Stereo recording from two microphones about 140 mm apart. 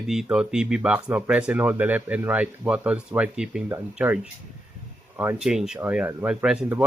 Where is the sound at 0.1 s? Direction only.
5° right (ahead or behind).